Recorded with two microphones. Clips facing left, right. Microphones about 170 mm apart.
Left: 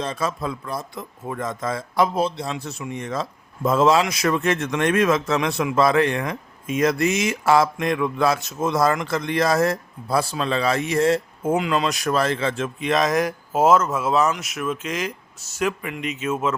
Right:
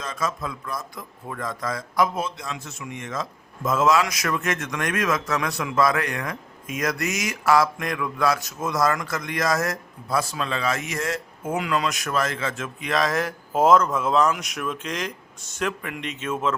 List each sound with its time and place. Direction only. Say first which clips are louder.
0.0 s speech: left 3 dB; 30° left (ahead or behind)
13.5 s speech: even; 5° left (ahead or behind)